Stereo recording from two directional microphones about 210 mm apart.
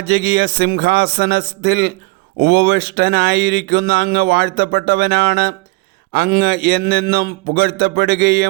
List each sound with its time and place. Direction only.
0.0 s speech: 50° right (ahead or behind)